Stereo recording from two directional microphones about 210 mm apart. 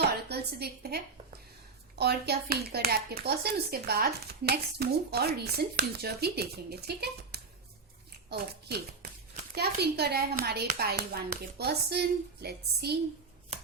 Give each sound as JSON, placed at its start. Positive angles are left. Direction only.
{"t": 0.3, "sound": "a woman's voice", "side_deg": -50}